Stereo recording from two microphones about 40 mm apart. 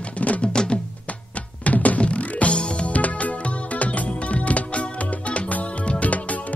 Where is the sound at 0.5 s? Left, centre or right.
Left.